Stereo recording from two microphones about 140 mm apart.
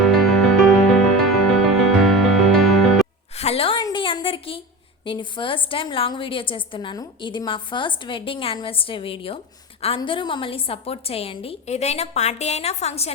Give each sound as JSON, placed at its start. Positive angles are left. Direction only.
{"t": 0.0, "sound": "music", "side_deg": 0}
{"t": 3.3, "sound": "a sound", "side_deg": 45}
{"t": 5.0, "sound": "a woman's voice", "side_deg": 35}